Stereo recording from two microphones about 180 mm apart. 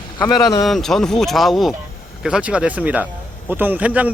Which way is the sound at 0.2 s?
20° left (ahead or behind).